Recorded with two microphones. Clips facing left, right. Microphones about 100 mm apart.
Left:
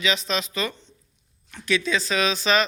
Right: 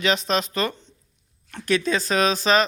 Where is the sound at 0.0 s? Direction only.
50° right (ahead or behind).